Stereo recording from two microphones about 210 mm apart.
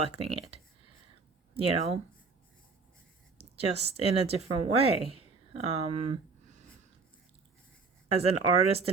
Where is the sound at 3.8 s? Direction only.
30° right (ahead or behind).